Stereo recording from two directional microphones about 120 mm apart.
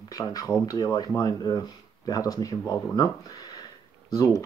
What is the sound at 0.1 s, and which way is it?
Speech, 30° left (ahead or behind).